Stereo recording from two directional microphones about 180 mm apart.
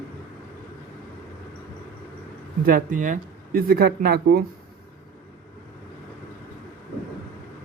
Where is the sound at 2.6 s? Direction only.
50° right (ahead or behind).